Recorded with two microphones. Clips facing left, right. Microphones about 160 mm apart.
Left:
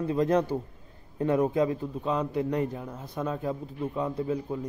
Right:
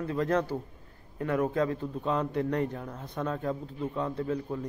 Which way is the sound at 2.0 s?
Centre (ahead or behind).